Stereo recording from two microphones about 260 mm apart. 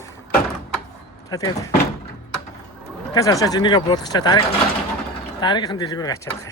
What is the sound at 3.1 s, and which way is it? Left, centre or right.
Speech, centre.